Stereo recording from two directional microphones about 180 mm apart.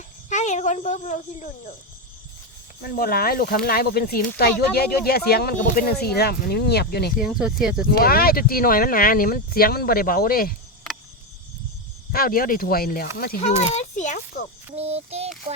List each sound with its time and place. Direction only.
0.3 s speech: 40° left (ahead or behind)
2.8 s speech: 55° left (ahead or behind)
7.2 s speech: 5° right (ahead or behind)
7.9 s speech: 55° left (ahead or behind)
12.1 s speech: 55° left (ahead or behind)
13.4 s speech: 35° left (ahead or behind)
14.8 s speech: 35° right (ahead or behind)